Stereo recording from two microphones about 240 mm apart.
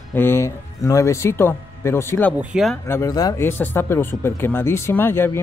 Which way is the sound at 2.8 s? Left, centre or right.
Centre.